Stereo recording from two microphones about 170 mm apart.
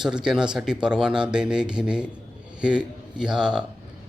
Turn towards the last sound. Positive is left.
turn(degrees=-5)  # may be behind; listen again after turning